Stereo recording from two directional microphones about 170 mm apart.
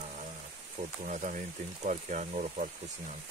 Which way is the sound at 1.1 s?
45° right (ahead or behind).